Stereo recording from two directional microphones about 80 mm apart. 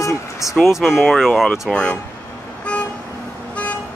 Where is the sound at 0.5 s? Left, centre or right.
Centre.